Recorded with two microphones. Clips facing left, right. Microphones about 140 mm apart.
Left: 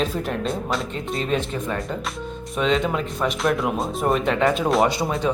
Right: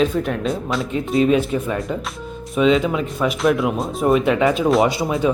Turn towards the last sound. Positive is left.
turn(degrees=-5)  # may be behind; listen again after turning